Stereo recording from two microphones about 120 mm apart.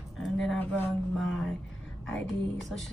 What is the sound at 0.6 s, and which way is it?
Speech, 15° left (ahead or behind).